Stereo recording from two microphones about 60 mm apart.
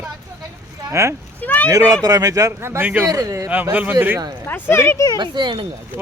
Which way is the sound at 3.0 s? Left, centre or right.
Right.